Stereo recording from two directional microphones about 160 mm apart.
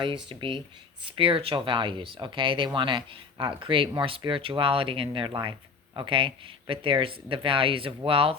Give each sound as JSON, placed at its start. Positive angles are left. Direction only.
{"t": 0.0, "sound": "speech", "side_deg": -30}